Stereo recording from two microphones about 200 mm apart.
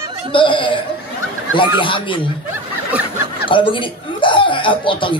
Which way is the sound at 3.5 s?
25° left (ahead or behind).